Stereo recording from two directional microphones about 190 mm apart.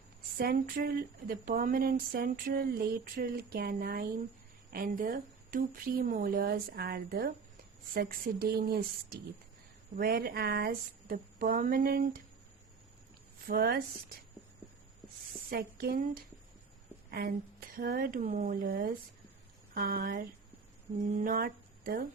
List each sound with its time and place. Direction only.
0.3 s speech: 50° right (ahead or behind)
13.5 s a woman's voice: 55° right (ahead or behind)
15.4 s a woman's voice: 55° right (ahead or behind)
21.0 s speech: 40° right (ahead or behind)